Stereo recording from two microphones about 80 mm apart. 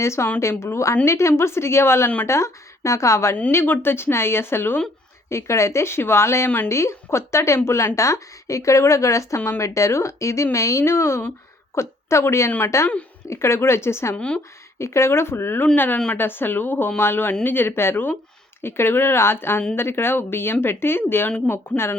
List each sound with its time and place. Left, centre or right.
0.0 s a woman's voice: left
14.2 s speech: centre
14.8 s a woman's voice: left